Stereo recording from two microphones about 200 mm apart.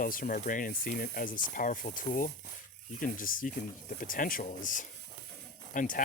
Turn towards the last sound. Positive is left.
turn(degrees=40)  # may be behind; listen again after turning